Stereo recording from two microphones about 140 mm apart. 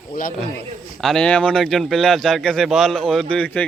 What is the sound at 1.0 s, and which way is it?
Speech, 5° left (ahead or behind).